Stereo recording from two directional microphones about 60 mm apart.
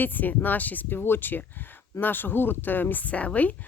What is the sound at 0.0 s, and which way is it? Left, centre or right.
Speech, left.